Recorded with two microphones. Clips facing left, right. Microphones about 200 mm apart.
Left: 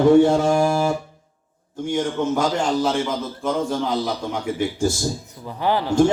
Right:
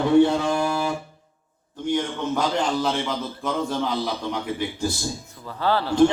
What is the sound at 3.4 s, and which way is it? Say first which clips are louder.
Speech: left 4 dB; centre (ahead or behind).